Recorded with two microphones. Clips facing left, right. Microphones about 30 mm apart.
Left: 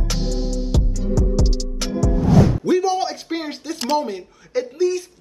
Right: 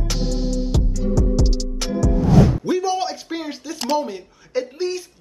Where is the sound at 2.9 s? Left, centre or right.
Centre.